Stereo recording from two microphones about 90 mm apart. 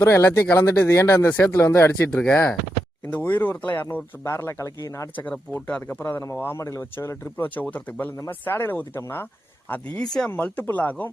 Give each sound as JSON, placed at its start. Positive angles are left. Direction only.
{"t": 0.0, "sound": "speech", "side_deg": 30}
{"t": 4.2, "sound": "speech", "side_deg": 30}
{"t": 5.5, "sound": "speech", "side_deg": 15}
{"t": 10.0, "sound": "speech", "side_deg": 10}
{"t": 10.3, "sound": "speech", "side_deg": 20}